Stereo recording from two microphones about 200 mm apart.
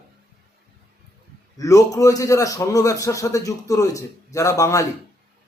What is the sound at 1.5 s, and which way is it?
A man's voice, 15° left (ahead or behind).